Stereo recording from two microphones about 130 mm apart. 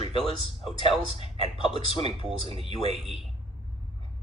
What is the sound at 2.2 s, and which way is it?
Speech, 45° right (ahead or behind).